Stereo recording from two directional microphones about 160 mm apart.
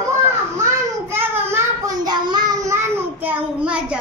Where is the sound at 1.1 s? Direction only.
15° right (ahead or behind).